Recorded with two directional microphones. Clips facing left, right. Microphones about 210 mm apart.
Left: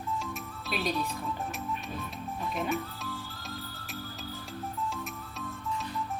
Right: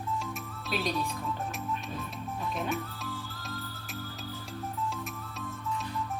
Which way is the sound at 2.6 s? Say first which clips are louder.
Left 3 dB; centre (ahead or behind).